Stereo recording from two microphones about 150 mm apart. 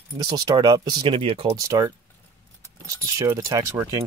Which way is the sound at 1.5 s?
20° right (ahead or behind).